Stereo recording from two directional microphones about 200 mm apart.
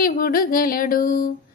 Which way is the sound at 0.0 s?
45° left (ahead or behind).